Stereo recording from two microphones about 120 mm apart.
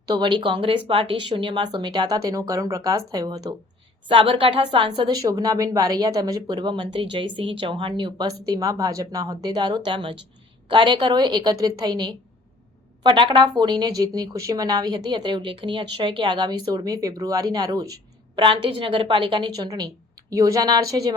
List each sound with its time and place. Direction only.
0.1 s speech: 40° right (ahead or behind)
4.1 s a woman's voice: 45° right (ahead or behind)
5.0 s speech: 30° right (ahead or behind)
18.3 s speech: 45° right (ahead or behind)